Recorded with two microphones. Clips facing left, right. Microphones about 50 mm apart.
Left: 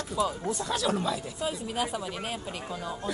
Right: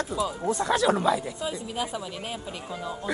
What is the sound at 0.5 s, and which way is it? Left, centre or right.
Speech, right.